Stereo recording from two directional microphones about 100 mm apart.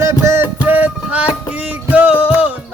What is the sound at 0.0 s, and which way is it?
Music, 30° right (ahead or behind).